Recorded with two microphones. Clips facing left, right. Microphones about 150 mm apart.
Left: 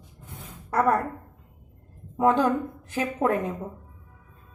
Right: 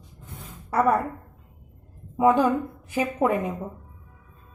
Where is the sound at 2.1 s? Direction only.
5° right (ahead or behind).